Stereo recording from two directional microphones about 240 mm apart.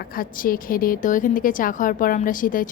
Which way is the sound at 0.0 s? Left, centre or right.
Left.